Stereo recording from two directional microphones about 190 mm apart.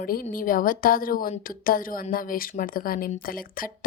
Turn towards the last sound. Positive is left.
turn(degrees=50)  # may be behind; listen again after turning